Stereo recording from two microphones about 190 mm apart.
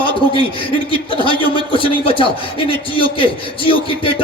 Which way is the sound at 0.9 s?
25° left (ahead or behind).